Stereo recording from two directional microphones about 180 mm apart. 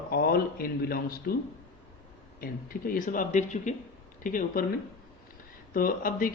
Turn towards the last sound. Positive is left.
turn(degrees=50)  # may be behind; listen again after turning